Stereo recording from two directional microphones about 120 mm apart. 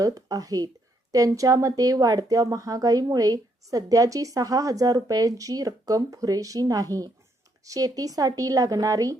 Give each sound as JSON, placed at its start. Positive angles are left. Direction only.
{"t": 0.0, "sound": "speech", "side_deg": -30}